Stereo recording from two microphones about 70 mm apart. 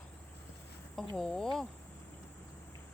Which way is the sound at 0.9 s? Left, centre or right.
Centre.